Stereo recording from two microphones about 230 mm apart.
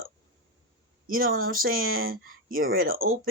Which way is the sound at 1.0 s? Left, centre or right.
Right.